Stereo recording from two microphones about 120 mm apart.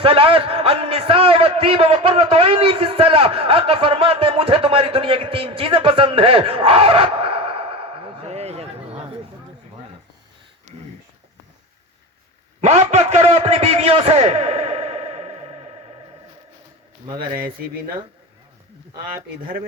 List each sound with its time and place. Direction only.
0.0 s a man's voice: 50° right (ahead or behind)
12.6 s a man's voice: 65° right (ahead or behind)